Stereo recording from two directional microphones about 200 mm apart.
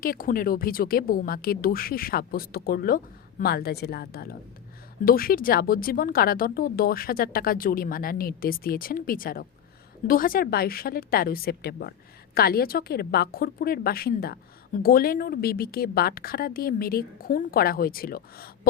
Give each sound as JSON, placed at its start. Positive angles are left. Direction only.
{"t": 0.0, "sound": "a woman's voice", "side_deg": 45}